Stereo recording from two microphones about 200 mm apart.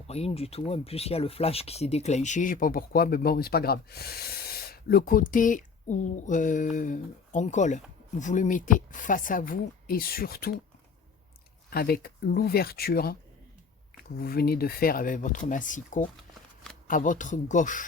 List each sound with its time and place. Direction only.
0.1 s speech: 30° left (ahead or behind); by 10.5 s 50° left (ahead or behind)
11.7 s speech: 50° left (ahead or behind)
14.2 s speech: 50° left (ahead or behind)